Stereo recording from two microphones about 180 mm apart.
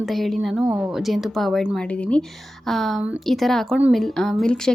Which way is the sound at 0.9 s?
Centre (ahead or behind).